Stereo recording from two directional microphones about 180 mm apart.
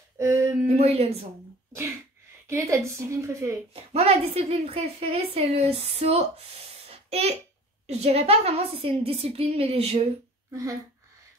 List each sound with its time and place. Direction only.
0.2 s a sound: 15° right (ahead or behind)
0.7 s speech: 35° right (ahead or behind)
2.4 s a woman's voice: 15° right (ahead or behind)
3.9 s a woman's voice: 35° right (ahead or behind)
6.9 s a sound: 35° right (ahead or behind)
7.8 s a woman's voice: 35° right (ahead or behind)
10.5 s speech: 15° right (ahead or behind)